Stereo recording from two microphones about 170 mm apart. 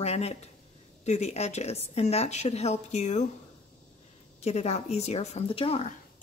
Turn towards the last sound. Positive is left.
turn(degrees=35)  # may be behind; listen again after turning